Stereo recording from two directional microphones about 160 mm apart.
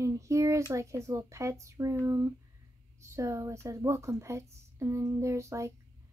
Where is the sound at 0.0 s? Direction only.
20° right (ahead or behind).